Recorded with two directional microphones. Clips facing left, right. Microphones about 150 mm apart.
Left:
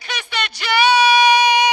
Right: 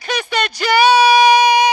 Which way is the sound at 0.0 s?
40° right (ahead or behind).